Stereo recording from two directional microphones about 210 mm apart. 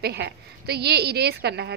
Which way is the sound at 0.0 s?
50° right (ahead or behind).